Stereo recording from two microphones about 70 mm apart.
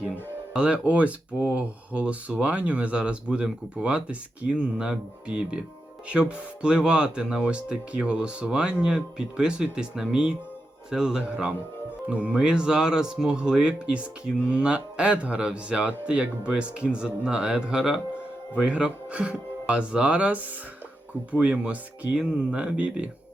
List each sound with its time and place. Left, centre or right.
0.5 s speech: centre